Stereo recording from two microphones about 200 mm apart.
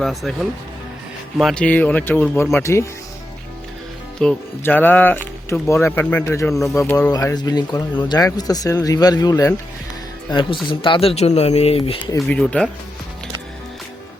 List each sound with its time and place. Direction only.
0.0 s speech: centre (ahead or behind)
1.4 s speech: centre (ahead or behind)
4.2 s speech: 5° left (ahead or behind); by 11.9 s 30° left (ahead or behind)
12.3 s speech: 5° left (ahead or behind)